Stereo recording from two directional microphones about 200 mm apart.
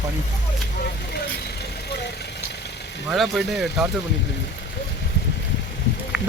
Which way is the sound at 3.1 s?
Centre (ahead or behind).